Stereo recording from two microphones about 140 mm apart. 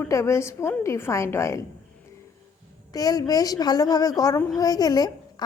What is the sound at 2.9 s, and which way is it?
Speech, 25° left (ahead or behind).